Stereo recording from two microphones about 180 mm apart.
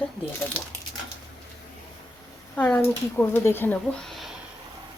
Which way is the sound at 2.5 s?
10° left (ahead or behind).